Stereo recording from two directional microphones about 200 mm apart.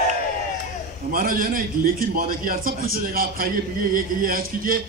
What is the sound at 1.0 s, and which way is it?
A man's voice, 45° right (ahead or behind).